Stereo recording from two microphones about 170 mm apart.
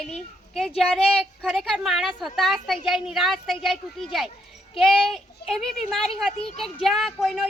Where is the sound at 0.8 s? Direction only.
5° left (ahead or behind).